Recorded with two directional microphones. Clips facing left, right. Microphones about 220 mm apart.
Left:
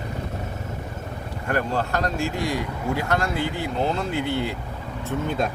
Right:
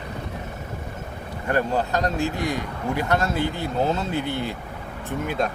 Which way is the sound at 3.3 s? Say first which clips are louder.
Right 1 dB; 15° left (ahead or behind).